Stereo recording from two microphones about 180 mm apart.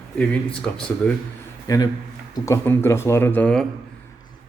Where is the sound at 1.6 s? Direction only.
20° left (ahead or behind).